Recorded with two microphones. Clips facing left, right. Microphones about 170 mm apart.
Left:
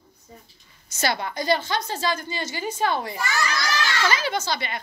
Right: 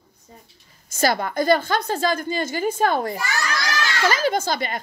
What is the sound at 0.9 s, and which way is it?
Speech, 50° right (ahead or behind).